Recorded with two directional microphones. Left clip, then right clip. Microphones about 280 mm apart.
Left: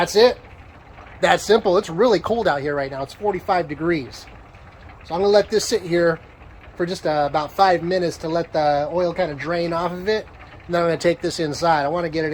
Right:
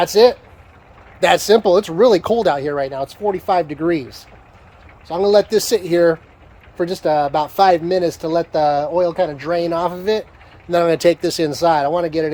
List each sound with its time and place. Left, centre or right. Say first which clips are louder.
0.0 s speech: right 3 dB; right
5.0 s speech: right 3 dB; right